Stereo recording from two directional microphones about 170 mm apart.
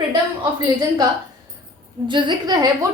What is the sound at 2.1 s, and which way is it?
Speech, 30° right (ahead or behind).